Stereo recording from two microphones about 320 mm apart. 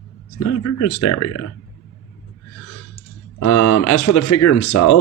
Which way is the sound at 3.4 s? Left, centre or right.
Left.